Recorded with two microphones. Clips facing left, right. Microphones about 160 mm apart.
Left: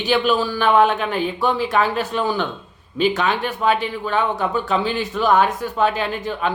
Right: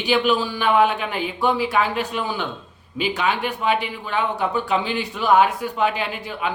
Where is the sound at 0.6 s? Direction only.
45° left (ahead or behind).